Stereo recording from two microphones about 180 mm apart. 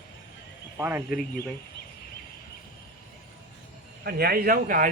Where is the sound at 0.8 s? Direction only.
10° right (ahead or behind).